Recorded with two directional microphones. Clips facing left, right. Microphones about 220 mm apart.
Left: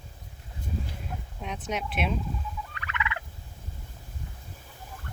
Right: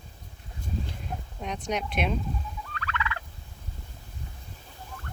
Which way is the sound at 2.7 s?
20° left (ahead or behind).